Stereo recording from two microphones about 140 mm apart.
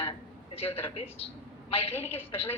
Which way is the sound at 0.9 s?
45° left (ahead or behind).